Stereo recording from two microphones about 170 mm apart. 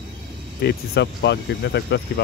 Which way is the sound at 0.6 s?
80° left.